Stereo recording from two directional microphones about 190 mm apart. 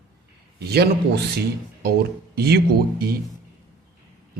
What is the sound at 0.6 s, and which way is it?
Speech, 55° right (ahead or behind).